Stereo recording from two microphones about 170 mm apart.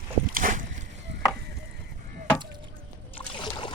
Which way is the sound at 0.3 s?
55° right (ahead or behind).